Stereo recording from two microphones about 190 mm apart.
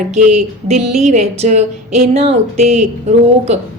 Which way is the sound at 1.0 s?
35° right (ahead or behind).